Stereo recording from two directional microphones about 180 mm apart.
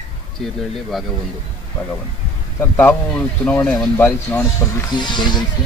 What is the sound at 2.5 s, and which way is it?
Speech, 10° left (ahead or behind).